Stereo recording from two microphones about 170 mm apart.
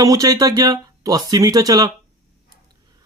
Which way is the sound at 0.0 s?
20° right (ahead or behind).